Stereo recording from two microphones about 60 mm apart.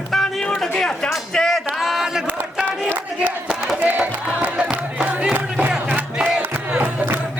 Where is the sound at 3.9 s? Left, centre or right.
Right.